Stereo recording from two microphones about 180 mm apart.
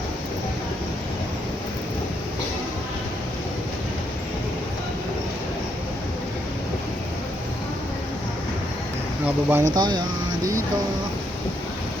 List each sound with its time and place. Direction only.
9.2 s speech: 10° right (ahead or behind)
9.7 s speech: 25° right (ahead or behind)